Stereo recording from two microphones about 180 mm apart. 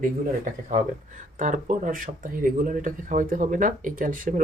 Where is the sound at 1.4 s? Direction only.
45° right (ahead or behind).